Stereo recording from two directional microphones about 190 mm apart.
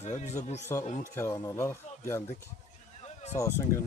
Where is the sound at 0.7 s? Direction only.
15° left (ahead or behind).